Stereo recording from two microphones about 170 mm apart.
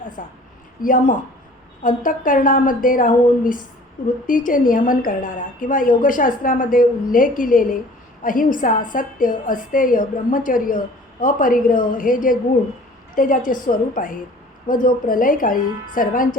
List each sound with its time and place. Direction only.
0.2 s a woman's voice: 50° left (ahead or behind)